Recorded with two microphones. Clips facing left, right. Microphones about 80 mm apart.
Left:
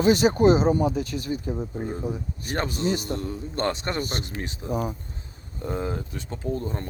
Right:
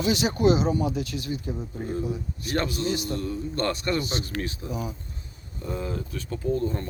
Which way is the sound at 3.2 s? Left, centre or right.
Left.